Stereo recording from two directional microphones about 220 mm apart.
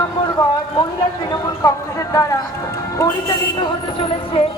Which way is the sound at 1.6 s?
15° left (ahead or behind).